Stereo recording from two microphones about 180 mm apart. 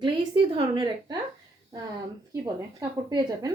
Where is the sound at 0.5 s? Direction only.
25° right (ahead or behind).